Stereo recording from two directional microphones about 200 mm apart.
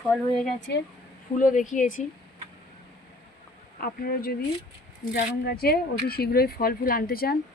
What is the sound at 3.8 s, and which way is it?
Speech, 50° left (ahead or behind).